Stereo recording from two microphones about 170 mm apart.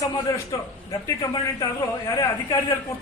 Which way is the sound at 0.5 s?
20° left (ahead or behind).